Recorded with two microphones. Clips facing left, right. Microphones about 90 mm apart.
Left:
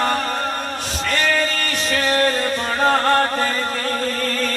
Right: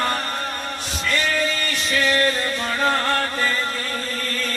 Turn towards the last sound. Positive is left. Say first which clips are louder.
# left 5 dB
turn(degrees=45)  # may be behind; listen again after turning